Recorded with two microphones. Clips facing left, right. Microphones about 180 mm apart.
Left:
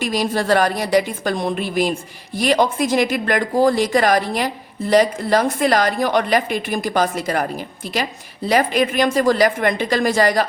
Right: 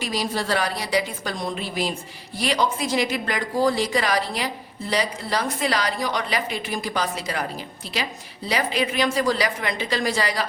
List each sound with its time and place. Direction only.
0.0 s speech: 50° left (ahead or behind)
8.4 s speech: 50° left (ahead or behind)